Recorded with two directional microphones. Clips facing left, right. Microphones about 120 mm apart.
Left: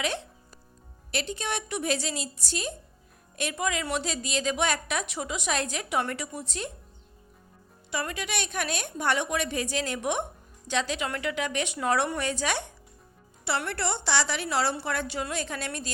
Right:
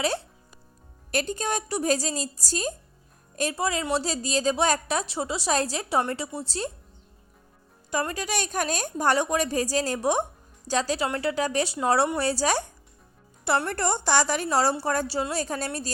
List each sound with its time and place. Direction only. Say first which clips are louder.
0.0 s a woman's voice: right 4 dB; 35° right (ahead or behind)
7.9 s a woman's voice: right 4 dB; 40° right (ahead or behind)